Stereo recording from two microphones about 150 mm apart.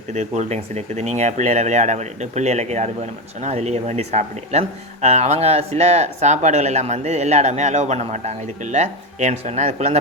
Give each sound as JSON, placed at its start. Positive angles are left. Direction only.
{"t": 0.1, "sound": "speech", "side_deg": -50}